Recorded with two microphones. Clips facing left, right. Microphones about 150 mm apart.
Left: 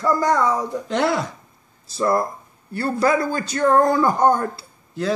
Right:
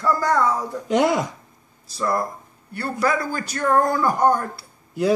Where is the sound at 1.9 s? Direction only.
25° left (ahead or behind).